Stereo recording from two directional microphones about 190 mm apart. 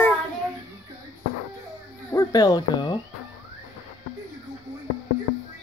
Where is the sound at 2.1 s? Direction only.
20° left (ahead or behind).